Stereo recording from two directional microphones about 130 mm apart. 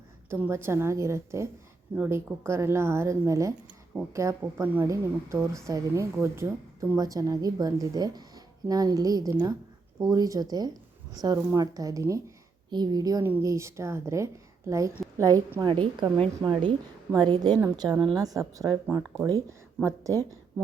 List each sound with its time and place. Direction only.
0.3 s a woman's voice: 15° right (ahead or behind)